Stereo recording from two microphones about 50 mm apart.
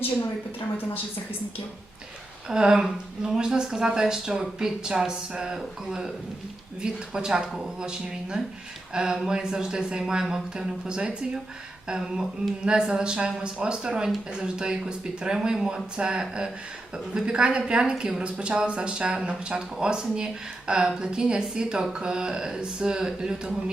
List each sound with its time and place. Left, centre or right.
2.5 s speech: centre
7.1 s speech: centre